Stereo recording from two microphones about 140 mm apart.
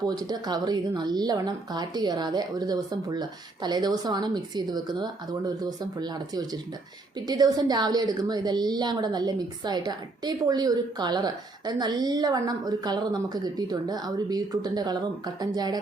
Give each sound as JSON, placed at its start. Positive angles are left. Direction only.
{"t": 0.0, "sound": "a woman's voice", "side_deg": -30}